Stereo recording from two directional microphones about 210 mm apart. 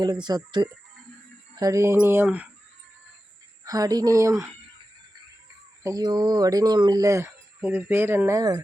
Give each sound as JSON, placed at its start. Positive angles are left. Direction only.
{"t": 0.0, "sound": "speech", "side_deg": -20}
{"t": 3.6, "sound": "speech", "side_deg": -15}
{"t": 5.8, "sound": "speech", "side_deg": -15}